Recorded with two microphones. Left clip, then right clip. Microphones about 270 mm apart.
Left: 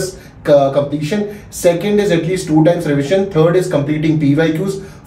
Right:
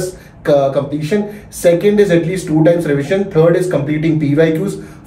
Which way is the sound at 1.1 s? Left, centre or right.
Centre.